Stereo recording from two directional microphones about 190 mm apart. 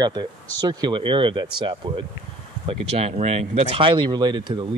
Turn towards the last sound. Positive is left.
turn(degrees=-25)  # may be behind; listen again after turning